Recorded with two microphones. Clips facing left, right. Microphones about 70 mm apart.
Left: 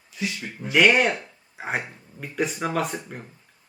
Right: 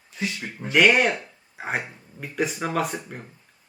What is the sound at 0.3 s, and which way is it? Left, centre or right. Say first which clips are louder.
Speech: right 1 dB; right.